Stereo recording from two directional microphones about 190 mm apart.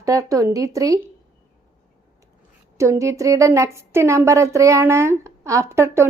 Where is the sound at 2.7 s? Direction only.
15° right (ahead or behind).